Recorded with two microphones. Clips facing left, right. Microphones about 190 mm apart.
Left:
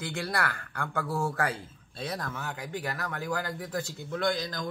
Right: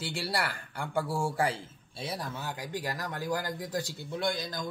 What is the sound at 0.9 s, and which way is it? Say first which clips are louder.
Speech: right 1 dB; 30° right (ahead or behind).